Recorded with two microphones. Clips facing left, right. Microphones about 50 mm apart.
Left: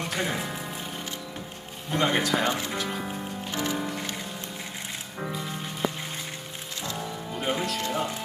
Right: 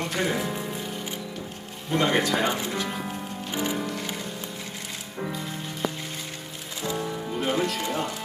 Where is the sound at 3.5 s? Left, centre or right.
Centre.